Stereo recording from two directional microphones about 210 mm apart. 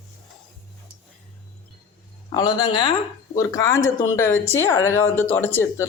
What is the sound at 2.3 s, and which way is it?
Speech, 20° left (ahead or behind).